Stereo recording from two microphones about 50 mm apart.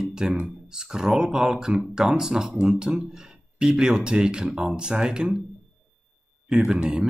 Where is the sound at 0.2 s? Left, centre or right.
Centre.